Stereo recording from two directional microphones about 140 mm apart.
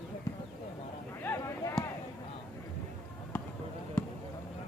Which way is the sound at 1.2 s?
20° left (ahead or behind).